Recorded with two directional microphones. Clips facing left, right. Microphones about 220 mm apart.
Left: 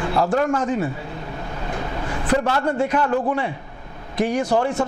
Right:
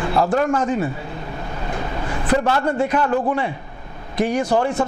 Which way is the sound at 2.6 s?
10° right (ahead or behind).